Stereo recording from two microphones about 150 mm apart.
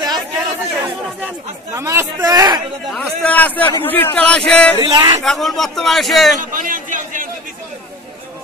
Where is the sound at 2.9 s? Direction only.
10° left (ahead or behind).